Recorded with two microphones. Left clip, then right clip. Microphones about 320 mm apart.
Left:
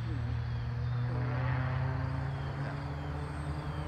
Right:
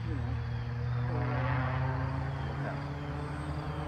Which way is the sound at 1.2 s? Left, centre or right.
Centre.